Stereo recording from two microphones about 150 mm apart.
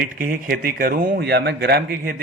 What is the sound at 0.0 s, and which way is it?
Speech, 70° right (ahead or behind).